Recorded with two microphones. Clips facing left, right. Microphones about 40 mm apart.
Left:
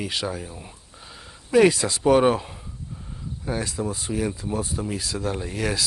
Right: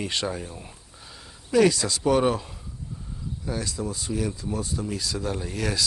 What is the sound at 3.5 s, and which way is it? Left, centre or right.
Speech, left.